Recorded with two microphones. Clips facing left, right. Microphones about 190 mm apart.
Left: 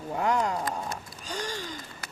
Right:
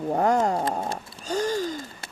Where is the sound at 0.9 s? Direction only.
40° right (ahead or behind).